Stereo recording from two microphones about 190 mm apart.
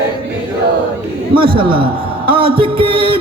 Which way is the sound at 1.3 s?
25° right (ahead or behind).